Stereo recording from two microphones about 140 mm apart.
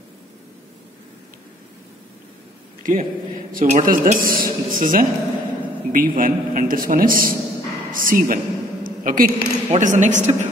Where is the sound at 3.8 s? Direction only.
80° right.